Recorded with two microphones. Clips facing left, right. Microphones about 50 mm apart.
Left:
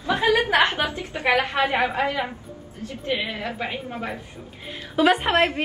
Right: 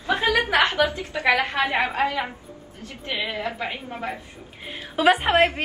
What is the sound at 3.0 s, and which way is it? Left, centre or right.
A woman's voice, right.